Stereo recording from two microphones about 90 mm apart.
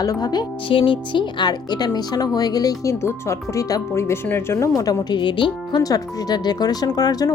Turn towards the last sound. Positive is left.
turn(degrees=45)  # may be behind; listen again after turning